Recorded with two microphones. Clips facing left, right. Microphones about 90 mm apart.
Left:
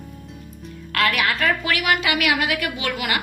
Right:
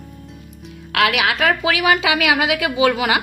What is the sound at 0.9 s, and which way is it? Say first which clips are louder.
Speech: right 4 dB; 85° right.